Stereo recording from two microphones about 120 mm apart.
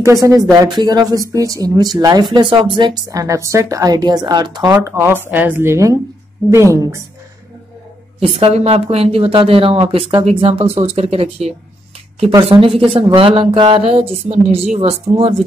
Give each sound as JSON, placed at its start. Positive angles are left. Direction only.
{"t": 0.0, "sound": "a woman's voice", "side_deg": -30}
{"t": 3.1, "sound": "a woman's voice", "side_deg": -25}
{"t": 4.6, "sound": "a woman's voice", "side_deg": -25}
{"t": 8.2, "sound": "speech", "side_deg": -55}
{"t": 12.4, "sound": "speech", "side_deg": -50}